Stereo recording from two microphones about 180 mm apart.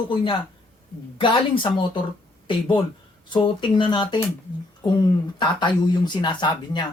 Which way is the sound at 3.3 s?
25° left (ahead or behind).